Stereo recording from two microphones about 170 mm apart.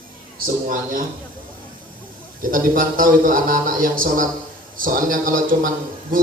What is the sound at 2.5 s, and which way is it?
A man's voice, 55° right (ahead or behind).